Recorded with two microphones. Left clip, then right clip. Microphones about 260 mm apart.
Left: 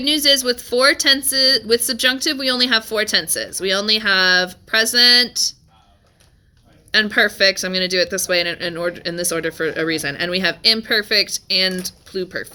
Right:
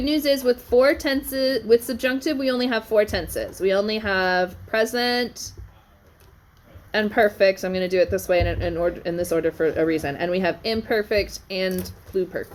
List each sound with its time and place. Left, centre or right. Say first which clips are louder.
0.0 s speech: left 5 dB; left
6.9 s speech: left 4 dB; left